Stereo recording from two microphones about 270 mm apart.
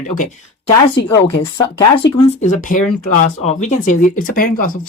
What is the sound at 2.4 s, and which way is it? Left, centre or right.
Speech, left.